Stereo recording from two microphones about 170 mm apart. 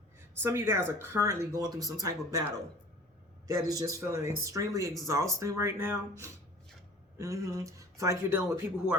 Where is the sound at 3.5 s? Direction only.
20° right (ahead or behind).